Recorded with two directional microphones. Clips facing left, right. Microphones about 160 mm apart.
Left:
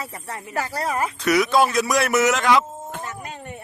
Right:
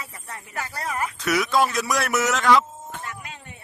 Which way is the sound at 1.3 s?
Centre (ahead or behind).